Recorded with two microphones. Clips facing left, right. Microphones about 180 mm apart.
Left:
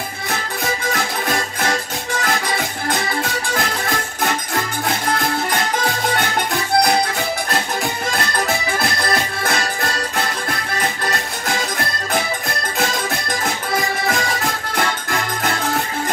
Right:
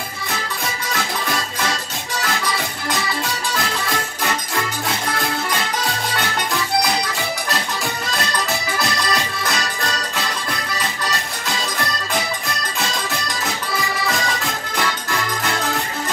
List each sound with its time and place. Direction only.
8.7 s accordion: 55° left (ahead or behind)
10.8 s music: 55° left (ahead or behind)